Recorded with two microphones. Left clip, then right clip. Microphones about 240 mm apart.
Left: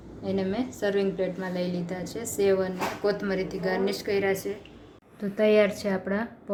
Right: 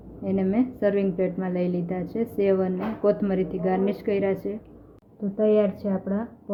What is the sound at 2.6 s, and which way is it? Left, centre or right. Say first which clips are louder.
A woman's voice: right 2 dB; right.